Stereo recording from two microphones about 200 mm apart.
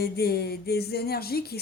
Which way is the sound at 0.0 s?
50° left (ahead or behind).